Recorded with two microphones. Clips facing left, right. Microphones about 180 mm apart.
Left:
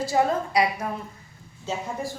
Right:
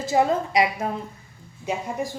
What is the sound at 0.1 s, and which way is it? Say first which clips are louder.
A woman's voice: right 4 dB; 20° right (ahead or behind).